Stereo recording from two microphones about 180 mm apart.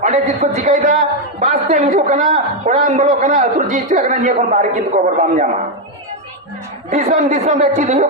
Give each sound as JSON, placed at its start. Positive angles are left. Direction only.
{"t": 0.0, "sound": "a woman's voice", "side_deg": -40}
{"t": 6.9, "sound": "a woman's voice", "side_deg": -45}